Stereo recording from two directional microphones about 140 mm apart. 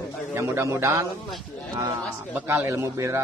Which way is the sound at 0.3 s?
20° right (ahead or behind).